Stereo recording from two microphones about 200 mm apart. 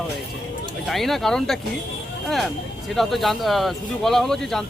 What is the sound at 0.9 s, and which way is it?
Speech, centre (ahead or behind).